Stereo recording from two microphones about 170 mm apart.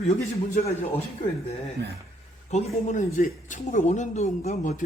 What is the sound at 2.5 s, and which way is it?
Speech, 40° left (ahead or behind).